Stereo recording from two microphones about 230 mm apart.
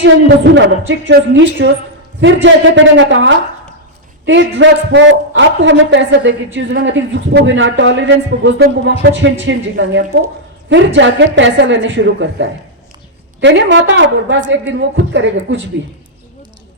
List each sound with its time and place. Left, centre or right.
0.5 s a man's voice: right